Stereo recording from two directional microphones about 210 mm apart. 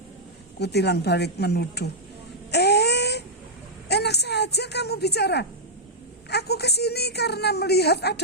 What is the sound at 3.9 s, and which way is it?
A woman's voice, 50° left (ahead or behind).